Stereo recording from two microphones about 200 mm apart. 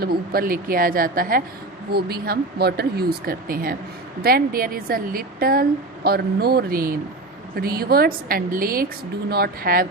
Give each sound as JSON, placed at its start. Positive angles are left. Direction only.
{"t": 0.0, "sound": "a woman's voice", "side_deg": -50}